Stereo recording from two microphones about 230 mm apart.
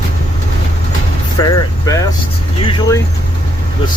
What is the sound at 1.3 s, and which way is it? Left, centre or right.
Speech, centre.